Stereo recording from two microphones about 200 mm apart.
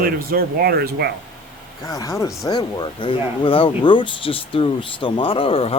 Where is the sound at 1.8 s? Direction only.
15° left (ahead or behind).